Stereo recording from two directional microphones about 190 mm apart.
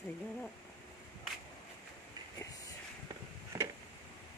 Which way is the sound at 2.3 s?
20° left (ahead or behind).